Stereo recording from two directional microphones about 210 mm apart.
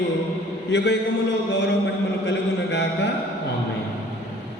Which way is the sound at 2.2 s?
55° left (ahead or behind).